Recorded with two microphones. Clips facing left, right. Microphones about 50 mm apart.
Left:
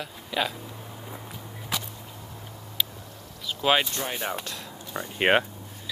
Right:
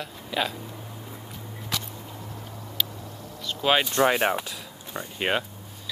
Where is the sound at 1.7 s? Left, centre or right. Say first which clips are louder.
Even; centre.